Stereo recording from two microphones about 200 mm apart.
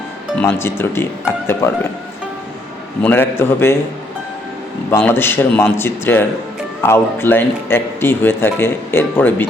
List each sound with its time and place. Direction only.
0.3 s speech: 10° left (ahead or behind)
3.0 s speech: 10° left (ahead or behind)
4.9 s speech: 10° left (ahead or behind)